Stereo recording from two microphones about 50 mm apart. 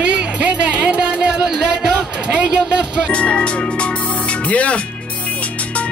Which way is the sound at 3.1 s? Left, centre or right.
Left.